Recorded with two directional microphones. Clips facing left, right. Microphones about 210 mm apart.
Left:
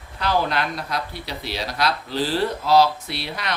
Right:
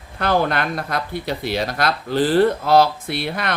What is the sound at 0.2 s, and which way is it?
Speech, 55° right (ahead or behind).